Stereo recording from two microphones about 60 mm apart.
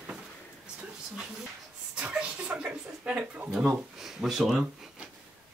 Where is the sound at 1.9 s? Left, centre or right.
Centre.